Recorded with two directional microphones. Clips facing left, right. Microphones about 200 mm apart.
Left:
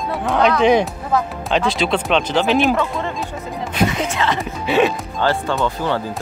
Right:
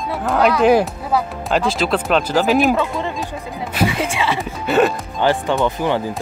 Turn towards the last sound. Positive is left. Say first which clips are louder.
# right 2 dB
turn(degrees=-15)  # may be behind; listen again after turning